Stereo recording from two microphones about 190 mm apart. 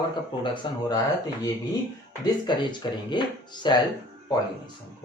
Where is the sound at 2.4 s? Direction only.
25° left (ahead or behind).